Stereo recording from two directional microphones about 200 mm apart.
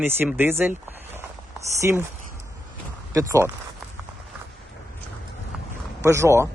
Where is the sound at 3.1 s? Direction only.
15° right (ahead or behind).